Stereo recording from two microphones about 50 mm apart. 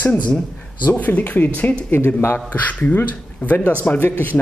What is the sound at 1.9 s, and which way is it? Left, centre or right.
Speech, left.